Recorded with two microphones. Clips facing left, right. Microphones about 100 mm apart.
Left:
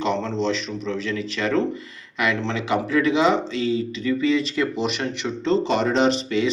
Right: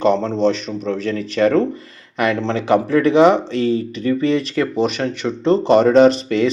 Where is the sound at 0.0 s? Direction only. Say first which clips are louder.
Right 7 dB; 45° right (ahead or behind).